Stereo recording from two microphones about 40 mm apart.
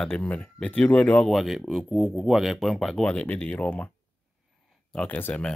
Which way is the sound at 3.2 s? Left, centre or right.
Left.